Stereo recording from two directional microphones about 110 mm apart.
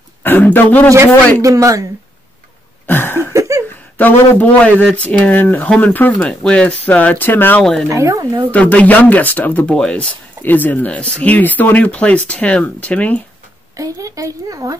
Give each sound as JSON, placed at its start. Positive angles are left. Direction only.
{"t": 0.2, "sound": "speech", "side_deg": 20}
{"t": 1.4, "sound": "speech", "side_deg": -30}
{"t": 2.9, "sound": "a sound", "side_deg": 20}
{"t": 3.3, "sound": "a sound", "side_deg": -25}
{"t": 4.0, "sound": "speech", "side_deg": 15}
{"t": 7.9, "sound": "speech", "side_deg": -30}
{"t": 8.5, "sound": "speech", "side_deg": 15}
{"t": 13.7, "sound": "speech", "side_deg": -30}